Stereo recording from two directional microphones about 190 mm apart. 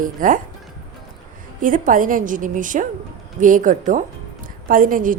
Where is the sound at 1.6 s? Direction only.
45° right (ahead or behind).